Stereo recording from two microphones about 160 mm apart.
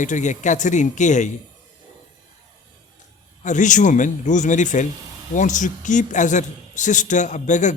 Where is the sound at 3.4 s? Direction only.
50° left (ahead or behind).